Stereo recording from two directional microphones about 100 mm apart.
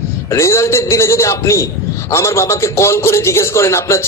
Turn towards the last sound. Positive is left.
turn(degrees=30)  # may be behind; listen again after turning